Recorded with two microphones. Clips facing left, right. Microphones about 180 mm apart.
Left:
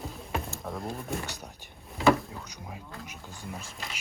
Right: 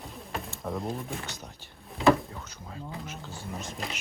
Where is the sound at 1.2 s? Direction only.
15° left (ahead or behind).